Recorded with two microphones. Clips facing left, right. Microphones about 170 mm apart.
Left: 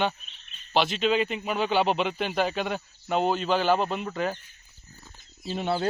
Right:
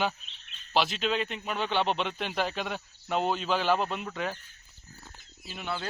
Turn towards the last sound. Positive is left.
turn(degrees=30)  # may be behind; listen again after turning